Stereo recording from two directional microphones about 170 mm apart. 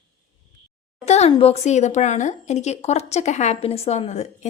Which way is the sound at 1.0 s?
40° left (ahead or behind).